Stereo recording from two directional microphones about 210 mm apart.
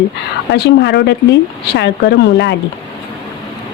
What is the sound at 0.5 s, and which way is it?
Speech, 55° left (ahead or behind).